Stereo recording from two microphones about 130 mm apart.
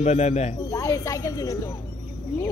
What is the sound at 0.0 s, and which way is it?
Speech, 60° left (ahead or behind).